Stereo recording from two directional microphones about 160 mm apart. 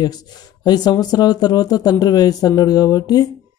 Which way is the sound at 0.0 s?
25° left (ahead or behind).